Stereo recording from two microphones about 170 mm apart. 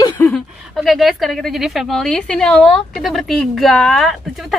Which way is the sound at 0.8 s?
Centre (ahead or behind).